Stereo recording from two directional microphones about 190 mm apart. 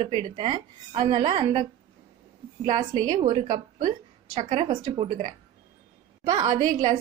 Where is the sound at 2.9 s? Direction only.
25° right (ahead or behind).